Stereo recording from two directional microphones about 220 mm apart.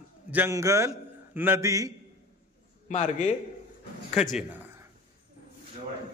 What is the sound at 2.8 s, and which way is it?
Speech, 35° left (ahead or behind).